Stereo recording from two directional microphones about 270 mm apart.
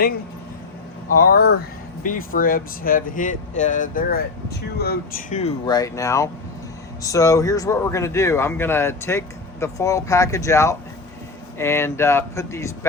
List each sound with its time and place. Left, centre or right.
1.3 s speech: left; by 12.9 s centre